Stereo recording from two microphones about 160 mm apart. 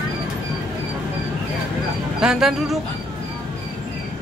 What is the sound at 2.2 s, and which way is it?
Speech, 5° right (ahead or behind).